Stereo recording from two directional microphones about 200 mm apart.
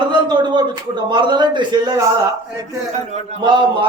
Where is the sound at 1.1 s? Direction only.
20° right (ahead or behind).